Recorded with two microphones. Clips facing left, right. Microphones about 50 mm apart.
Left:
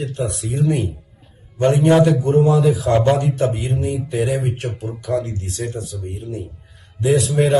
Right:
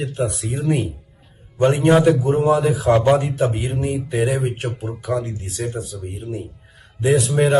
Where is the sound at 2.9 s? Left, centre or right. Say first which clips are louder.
Right 4 dB; centre.